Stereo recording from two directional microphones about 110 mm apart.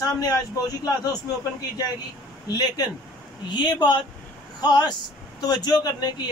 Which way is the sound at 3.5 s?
40° left (ahead or behind).